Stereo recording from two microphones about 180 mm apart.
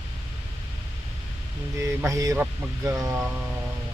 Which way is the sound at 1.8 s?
15° right (ahead or behind).